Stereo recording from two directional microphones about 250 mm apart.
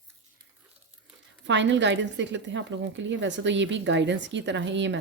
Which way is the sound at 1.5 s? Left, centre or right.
Right.